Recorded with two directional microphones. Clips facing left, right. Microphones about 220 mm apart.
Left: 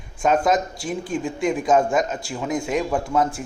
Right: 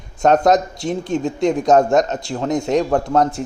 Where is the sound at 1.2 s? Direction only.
40° right (ahead or behind).